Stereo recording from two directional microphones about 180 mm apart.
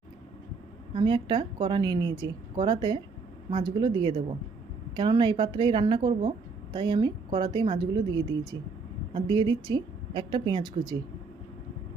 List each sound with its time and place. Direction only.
0.9 s a woman's voice: 25° right (ahead or behind)